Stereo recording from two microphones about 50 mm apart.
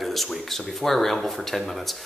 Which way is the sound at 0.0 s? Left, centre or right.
Centre.